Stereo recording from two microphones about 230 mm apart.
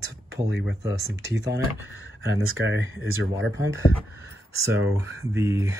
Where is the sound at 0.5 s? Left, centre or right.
Right.